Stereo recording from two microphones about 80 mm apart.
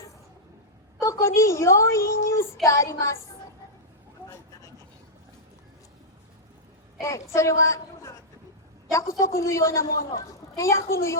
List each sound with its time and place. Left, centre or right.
1.0 s a woman's voice: left
7.0 s a woman's voice: left